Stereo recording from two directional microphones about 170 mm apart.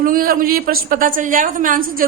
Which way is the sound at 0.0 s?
55° right (ahead or behind).